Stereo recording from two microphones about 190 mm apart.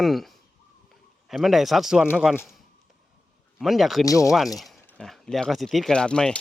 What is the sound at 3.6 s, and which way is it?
Speech, centre (ahead or behind).